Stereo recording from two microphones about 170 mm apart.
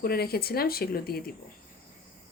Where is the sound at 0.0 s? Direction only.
65° left (ahead or behind).